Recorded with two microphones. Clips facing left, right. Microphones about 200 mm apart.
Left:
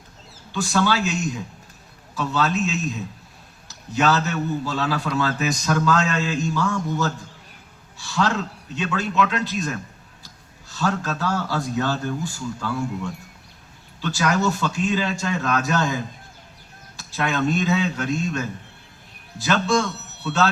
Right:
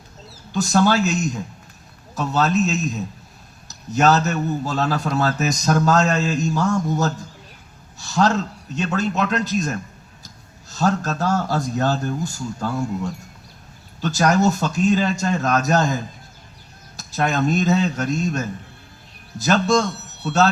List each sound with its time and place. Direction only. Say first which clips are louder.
0.5 s a man's voice: right 4 dB; 45° right (ahead or behind)
17.0 s a man's voice: right 2 dB; 45° right (ahead or behind)